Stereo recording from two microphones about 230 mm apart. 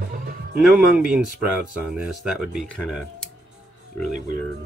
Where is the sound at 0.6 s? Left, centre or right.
Centre.